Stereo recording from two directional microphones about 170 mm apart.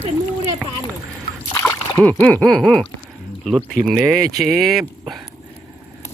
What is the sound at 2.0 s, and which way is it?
Speech, 10° left (ahead or behind).